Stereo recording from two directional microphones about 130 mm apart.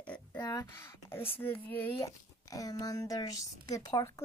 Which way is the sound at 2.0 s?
25° left (ahead or behind).